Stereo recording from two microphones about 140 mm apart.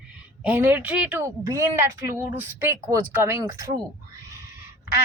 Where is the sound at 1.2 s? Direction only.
20° right (ahead or behind).